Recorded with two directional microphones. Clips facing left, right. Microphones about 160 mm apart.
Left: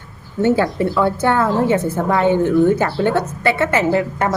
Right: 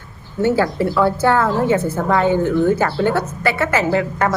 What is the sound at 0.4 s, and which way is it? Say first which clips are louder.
A woman's voice: left 1 dB; 20° left (ahead or behind).